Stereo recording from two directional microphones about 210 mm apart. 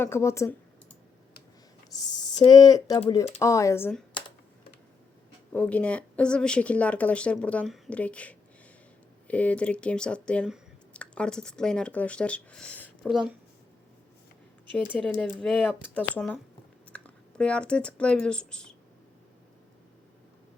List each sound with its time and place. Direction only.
0.0 s speech: 10° left (ahead or behind)
2.0 s a sound: 20° left (ahead or behind)
2.5 s speech: 20° left (ahead or behind)
5.5 s speech: 5° left (ahead or behind)
14.9 s speech: 5° left (ahead or behind)